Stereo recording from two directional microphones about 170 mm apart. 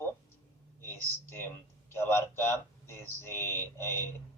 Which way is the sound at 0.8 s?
15° left (ahead or behind).